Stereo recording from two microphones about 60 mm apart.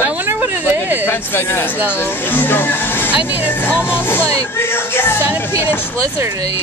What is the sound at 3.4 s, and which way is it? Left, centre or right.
Speech, left.